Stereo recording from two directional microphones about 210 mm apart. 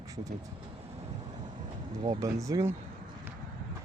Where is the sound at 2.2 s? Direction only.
15° right (ahead or behind).